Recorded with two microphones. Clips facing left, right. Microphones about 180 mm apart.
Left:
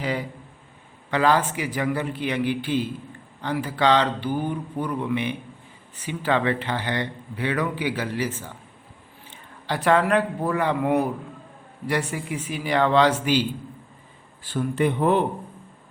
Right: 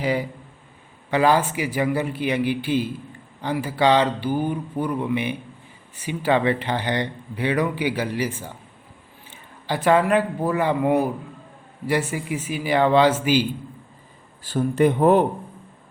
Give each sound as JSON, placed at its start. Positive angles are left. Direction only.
{"t": 0.0, "sound": "speech", "side_deg": -10}
{"t": 9.3, "sound": "speech", "side_deg": 0}
{"t": 14.4, "sound": "speech", "side_deg": -40}